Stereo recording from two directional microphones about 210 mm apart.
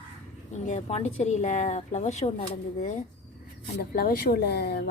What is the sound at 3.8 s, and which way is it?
Speech, 45° left (ahead or behind).